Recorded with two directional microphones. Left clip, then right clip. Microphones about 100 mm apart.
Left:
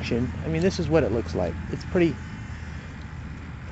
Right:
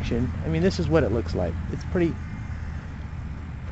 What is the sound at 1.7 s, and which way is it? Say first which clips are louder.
Speech: left 3 dB; 35° left (ahead or behind).